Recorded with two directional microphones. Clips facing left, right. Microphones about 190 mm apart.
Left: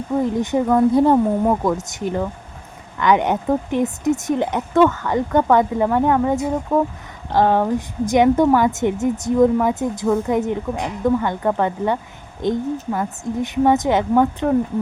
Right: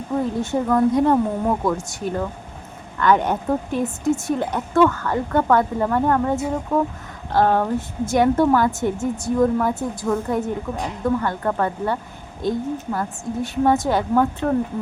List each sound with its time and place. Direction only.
0.3 s a woman's voice: 15° left (ahead or behind)